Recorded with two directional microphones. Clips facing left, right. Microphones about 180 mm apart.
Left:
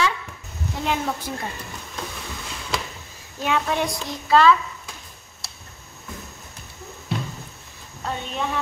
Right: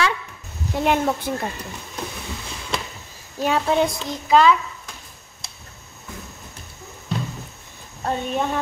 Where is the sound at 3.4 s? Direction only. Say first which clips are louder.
Right 4 dB; 30° right (ahead or behind).